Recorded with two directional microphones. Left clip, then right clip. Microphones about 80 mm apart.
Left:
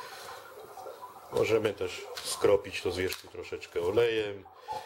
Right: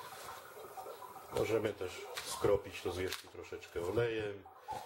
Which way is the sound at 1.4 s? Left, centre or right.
Left.